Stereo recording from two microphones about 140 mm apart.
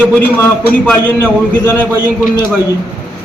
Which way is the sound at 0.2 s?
15° left (ahead or behind).